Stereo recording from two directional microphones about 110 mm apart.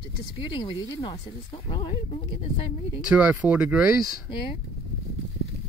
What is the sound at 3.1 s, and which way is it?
Speech, 10° right (ahead or behind).